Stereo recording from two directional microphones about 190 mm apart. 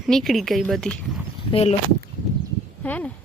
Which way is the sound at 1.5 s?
35° left (ahead or behind).